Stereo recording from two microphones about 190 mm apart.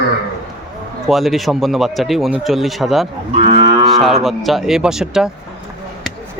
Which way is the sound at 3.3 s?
30° right (ahead or behind).